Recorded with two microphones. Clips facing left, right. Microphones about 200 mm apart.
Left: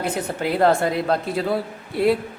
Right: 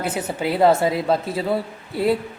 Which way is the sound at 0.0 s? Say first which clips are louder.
Even; 5° right (ahead or behind).